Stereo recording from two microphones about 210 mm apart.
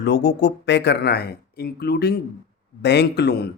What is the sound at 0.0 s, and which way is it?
Speech, 55° left (ahead or behind).